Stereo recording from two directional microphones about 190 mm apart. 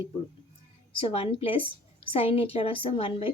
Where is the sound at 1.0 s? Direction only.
30° left (ahead or behind).